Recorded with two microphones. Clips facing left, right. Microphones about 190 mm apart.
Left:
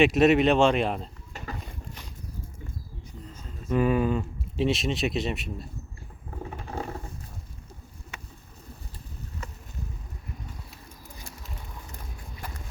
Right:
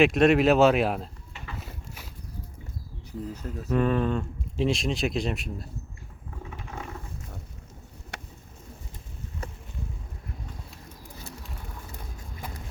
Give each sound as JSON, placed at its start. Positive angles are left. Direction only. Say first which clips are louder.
{"t": 0.0, "sound": "speech", "louder": "even", "side_deg": 0}
{"t": 1.5, "sound": "a sound", "louder": "left 1 dB", "side_deg": -5}
{"t": 3.7, "sound": "speech", "louder": "left 1 dB", "side_deg": 5}
{"t": 6.4, "sound": "mechanisms", "louder": "left 5 dB", "side_deg": 35}